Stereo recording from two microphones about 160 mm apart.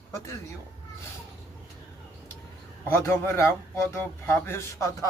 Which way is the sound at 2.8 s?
15° left (ahead or behind).